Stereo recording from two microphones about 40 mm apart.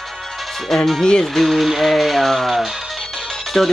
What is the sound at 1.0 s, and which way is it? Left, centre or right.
Speech, centre.